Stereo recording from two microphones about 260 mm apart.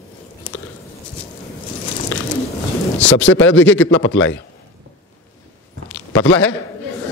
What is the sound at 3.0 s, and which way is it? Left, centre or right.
Speech, left.